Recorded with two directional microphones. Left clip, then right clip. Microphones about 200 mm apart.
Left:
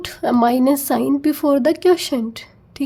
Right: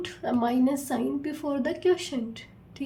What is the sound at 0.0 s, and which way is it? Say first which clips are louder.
A woman's voice: left 11 dB; 50° left (ahead or behind).